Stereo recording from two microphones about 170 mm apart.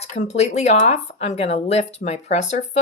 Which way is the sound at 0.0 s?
40° left (ahead or behind).